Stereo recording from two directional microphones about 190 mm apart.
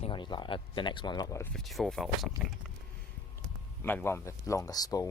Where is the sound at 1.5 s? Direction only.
Centre (ahead or behind).